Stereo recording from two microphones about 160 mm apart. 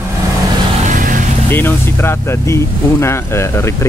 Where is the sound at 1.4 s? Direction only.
15° left (ahead or behind).